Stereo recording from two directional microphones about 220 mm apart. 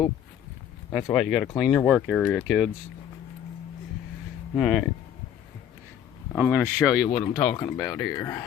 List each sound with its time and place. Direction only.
1.1 s speech: centre (ahead or behind)
4.5 s speech: centre (ahead or behind)
6.3 s speech: 5° right (ahead or behind)
7.5 s speech: 20° left (ahead or behind)